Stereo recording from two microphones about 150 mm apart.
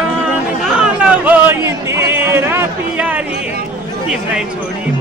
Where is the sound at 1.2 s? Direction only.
15° right (ahead or behind).